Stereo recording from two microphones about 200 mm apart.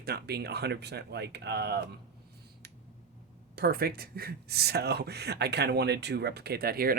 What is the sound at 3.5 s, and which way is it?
Speech, 50° right (ahead or behind).